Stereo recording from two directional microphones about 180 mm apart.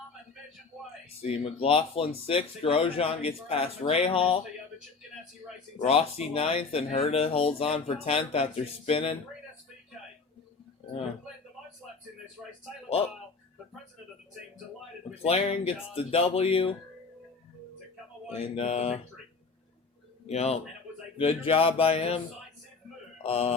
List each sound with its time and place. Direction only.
1.2 s speech: 30° left (ahead or behind)
5.8 s speech: 35° left (ahead or behind)
10.8 s a sound: 35° left (ahead or behind)
12.4 s a man's voice: 5° right (ahead or behind)
15.1 s speech: 35° left (ahead or behind)
18.3 s speech: 35° left (ahead or behind)
20.2 s speech: 35° left (ahead or behind)
23.2 s speech: 35° left (ahead or behind)